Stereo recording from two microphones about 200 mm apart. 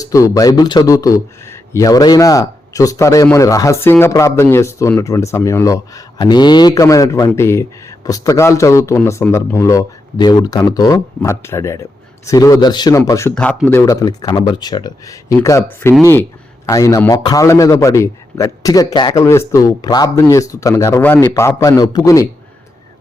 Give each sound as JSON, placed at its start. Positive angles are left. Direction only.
{"t": 0.0, "sound": "speech", "side_deg": 15}